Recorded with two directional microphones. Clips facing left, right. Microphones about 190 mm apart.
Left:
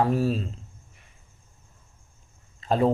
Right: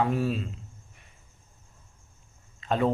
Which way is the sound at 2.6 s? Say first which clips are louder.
Left 3 dB; 35° left (ahead or behind).